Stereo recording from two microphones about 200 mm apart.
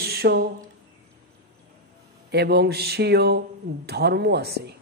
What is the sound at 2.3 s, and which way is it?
A man's voice, 55° right (ahead or behind).